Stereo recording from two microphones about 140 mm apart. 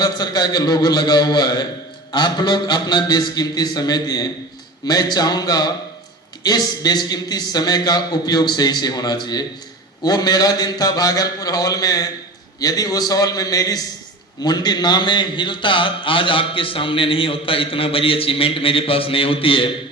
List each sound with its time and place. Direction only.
0.0 s a man's voice: 30° left (ahead or behind)